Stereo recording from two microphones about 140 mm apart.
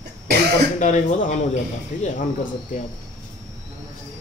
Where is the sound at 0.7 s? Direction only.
60° left (ahead or behind).